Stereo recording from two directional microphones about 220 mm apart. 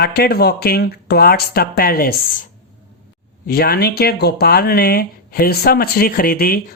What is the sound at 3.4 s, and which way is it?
Speech, 45° left (ahead or behind).